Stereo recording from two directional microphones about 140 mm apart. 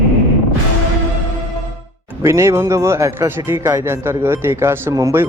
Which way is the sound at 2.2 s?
20° right (ahead or behind).